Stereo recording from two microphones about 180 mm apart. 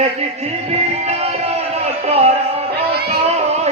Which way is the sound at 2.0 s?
35° right (ahead or behind).